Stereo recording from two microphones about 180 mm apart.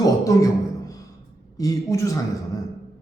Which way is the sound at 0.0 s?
20° left (ahead or behind).